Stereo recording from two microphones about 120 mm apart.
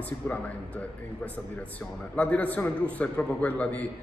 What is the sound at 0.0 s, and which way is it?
A man's voice, 10° left (ahead or behind).